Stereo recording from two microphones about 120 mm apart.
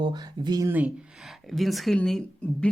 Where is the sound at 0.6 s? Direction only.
15° right (ahead or behind).